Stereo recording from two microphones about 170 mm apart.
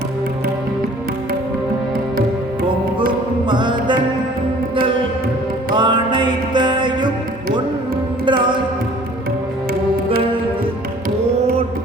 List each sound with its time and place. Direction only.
3.4 s music: 25° right (ahead or behind)
5.7 s music: 25° right (ahead or behind)
8.2 s carnatic music: 30° right (ahead or behind)